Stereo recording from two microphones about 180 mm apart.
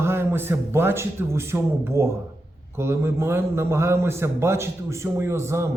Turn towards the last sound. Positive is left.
turn(degrees=-15)  # may be behind; listen again after turning